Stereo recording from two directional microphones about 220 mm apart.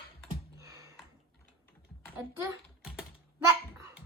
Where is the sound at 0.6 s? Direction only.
15° right (ahead or behind).